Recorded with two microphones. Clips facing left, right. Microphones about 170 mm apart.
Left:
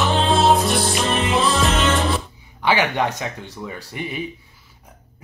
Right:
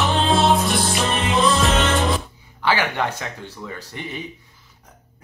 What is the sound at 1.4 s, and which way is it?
Music, 35° left (ahead or behind).